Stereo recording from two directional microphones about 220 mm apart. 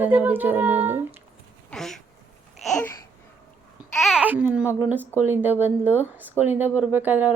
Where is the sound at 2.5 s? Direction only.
Centre (ahead or behind).